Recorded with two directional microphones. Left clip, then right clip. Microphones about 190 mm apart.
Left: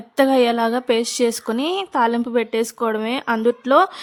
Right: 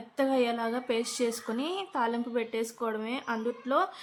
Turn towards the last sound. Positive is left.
turn(degrees=55)  # may be behind; listen again after turning